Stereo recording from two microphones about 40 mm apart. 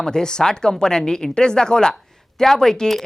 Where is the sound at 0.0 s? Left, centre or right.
Centre.